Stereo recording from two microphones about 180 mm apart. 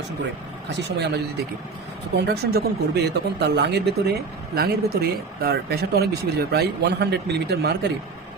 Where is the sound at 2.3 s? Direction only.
65° right (ahead or behind).